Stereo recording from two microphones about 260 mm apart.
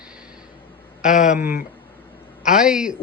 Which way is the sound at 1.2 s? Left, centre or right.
Centre.